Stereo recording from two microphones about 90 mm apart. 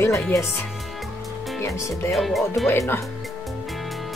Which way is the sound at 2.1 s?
Centre (ahead or behind).